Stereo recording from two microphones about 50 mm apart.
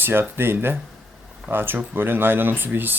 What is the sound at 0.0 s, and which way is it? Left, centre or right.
Speech, right.